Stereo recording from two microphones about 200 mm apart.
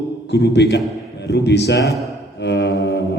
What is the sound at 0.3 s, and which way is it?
A man's voice, 60° left (ahead or behind).